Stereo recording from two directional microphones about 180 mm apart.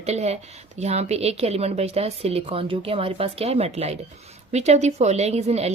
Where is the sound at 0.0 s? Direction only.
35° right (ahead or behind).